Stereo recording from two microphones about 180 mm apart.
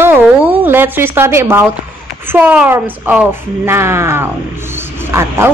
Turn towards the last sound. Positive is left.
turn(degrees=-15)  # may be behind; listen again after turning